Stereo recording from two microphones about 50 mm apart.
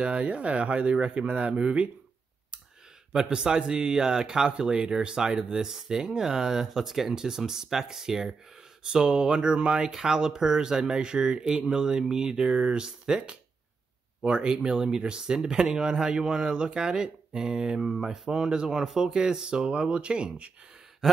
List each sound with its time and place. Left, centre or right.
0.0 s speech: right
3.1 s speech: centre